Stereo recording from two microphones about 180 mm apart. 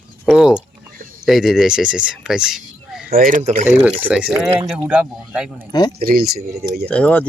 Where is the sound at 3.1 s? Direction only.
50° right (ahead or behind).